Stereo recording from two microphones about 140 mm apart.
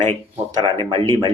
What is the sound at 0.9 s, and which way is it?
Speech, 30° right (ahead or behind).